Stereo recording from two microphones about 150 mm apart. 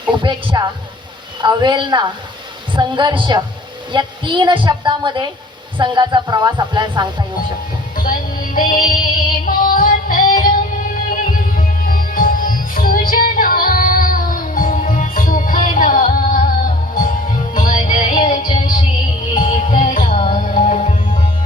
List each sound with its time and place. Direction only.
0.0 s a woman's voice: 30° right (ahead or behind)
7.9 s music: 70° left (ahead or behind)
19.4 s music: 60° left (ahead or behind)